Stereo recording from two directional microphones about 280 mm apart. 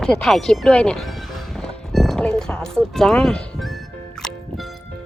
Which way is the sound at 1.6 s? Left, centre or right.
Centre.